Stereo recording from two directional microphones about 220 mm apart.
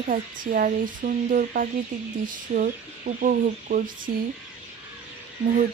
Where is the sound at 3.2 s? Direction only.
40° right (ahead or behind).